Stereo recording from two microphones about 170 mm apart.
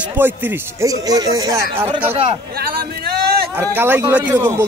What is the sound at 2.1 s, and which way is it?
Speech, 35° right (ahead or behind).